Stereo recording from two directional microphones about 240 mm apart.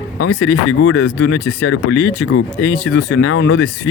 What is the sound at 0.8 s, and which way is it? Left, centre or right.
Speech, left.